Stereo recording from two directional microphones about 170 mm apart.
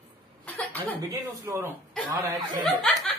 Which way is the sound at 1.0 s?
20° right (ahead or behind).